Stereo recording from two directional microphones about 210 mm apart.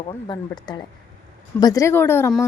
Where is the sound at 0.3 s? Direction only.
20° left (ahead or behind).